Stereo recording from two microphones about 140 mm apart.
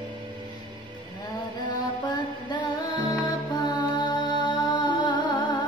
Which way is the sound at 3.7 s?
30° left (ahead or behind).